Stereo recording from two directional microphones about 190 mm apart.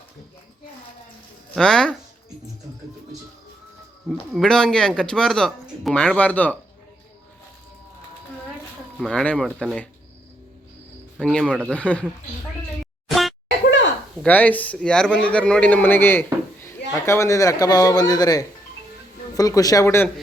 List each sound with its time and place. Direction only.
1.5 s speech: 5° left (ahead or behind)
4.3 s speech: centre (ahead or behind)
9.0 s speech: 5° left (ahead or behind)
11.2 s a man's voice: 5° left (ahead or behind)
13.1 s a sound: centre (ahead or behind)
13.7 s a sound: 70° left (ahead or behind)
14.2 s a man's voice: 10° left (ahead or behind)